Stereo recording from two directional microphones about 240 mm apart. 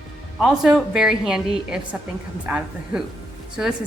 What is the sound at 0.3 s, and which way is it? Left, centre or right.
A woman's voice, centre.